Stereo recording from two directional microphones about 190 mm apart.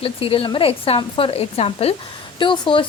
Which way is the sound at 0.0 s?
30° left (ahead or behind).